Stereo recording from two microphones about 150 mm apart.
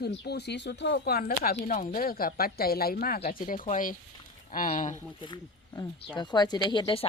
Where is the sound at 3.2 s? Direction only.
65° left (ahead or behind).